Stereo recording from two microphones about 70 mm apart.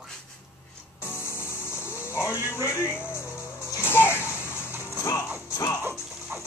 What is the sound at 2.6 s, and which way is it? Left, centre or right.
Speech, left.